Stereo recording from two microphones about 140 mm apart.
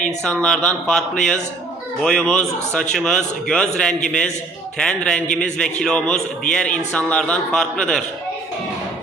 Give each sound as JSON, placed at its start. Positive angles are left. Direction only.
{"t": 0.0, "sound": "a man's voice", "side_deg": 5}